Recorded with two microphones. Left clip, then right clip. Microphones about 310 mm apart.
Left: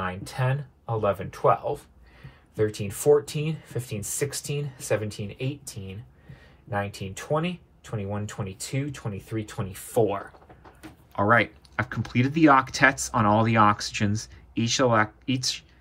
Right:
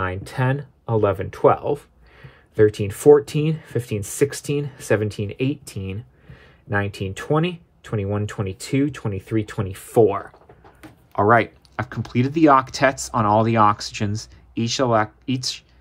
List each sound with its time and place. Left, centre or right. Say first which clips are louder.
0.0 s speech: right 5 dB; right